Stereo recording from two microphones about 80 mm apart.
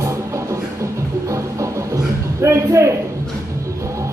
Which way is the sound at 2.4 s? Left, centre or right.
Right.